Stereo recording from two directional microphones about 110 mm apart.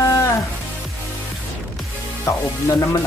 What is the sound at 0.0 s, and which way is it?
Music, 30° left (ahead or behind).